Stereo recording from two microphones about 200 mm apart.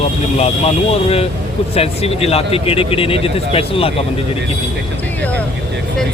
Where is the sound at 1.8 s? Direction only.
30° left (ahead or behind).